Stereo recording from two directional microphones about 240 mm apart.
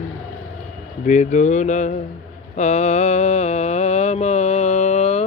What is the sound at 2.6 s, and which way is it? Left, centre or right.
Mantra, left.